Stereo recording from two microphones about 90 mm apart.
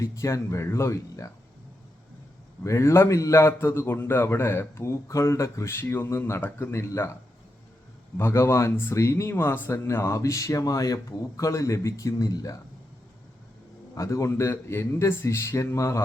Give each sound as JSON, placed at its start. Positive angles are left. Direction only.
{"t": 0.0, "sound": "speech", "side_deg": 35}
{"t": 2.6, "sound": "a man's voice", "side_deg": 35}
{"t": 8.2, "sound": "a man's voice", "side_deg": 30}
{"t": 13.9, "sound": "speech", "side_deg": 35}